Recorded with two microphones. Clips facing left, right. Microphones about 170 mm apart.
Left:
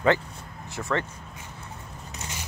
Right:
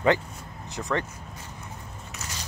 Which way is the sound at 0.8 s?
20° right (ahead or behind).